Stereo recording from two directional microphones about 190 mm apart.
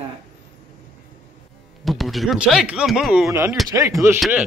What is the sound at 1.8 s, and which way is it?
Speech, centre (ahead or behind).